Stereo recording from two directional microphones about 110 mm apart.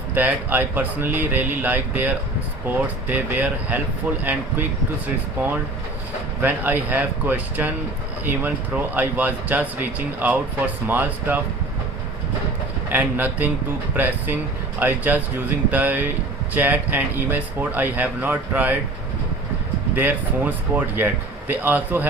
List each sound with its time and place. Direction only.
0.1 s speech: 15° right (ahead or behind)
12.9 s speech: 15° right (ahead or behind)
20.0 s speech: 15° right (ahead or behind)